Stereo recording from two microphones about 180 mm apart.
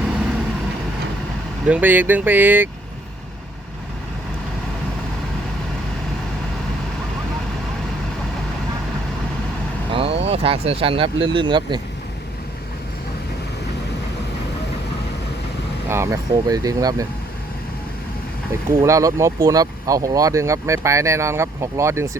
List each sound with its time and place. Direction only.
1.6 s speech: 10° right (ahead or behind)
9.9 s speech: 30° right (ahead or behind)
15.9 s speech: 15° right (ahead or behind)
18.8 s speech: 15° right (ahead or behind)